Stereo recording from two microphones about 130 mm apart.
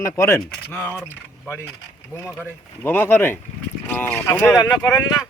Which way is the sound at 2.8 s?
15° left (ahead or behind).